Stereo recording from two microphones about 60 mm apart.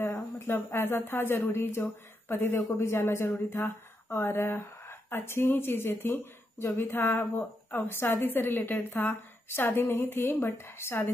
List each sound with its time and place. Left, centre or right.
0.0 s speech: left